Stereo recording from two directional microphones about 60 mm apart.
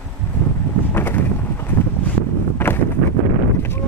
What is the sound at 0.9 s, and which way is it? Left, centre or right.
Vehicle, left.